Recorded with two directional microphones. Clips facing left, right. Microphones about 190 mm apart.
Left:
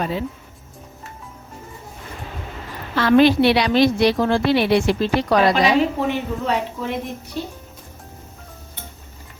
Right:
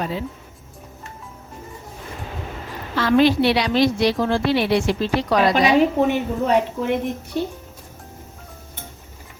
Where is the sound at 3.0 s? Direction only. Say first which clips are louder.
Left 2 dB; 65° left (ahead or behind).